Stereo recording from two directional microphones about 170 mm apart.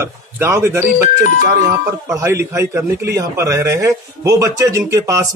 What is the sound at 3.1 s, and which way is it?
Speech, 20° right (ahead or behind).